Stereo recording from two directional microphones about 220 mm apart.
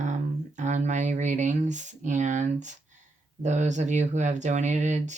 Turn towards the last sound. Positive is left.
turn(degrees=-30)  # may be behind; listen again after turning